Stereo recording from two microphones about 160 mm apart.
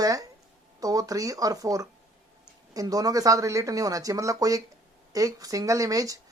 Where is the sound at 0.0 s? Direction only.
20° right (ahead or behind).